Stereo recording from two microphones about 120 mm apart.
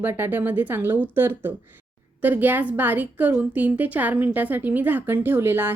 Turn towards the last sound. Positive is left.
turn(degrees=-20)  # may be behind; listen again after turning